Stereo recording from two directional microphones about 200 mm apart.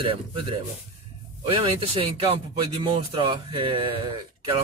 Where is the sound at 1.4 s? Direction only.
25° right (ahead or behind).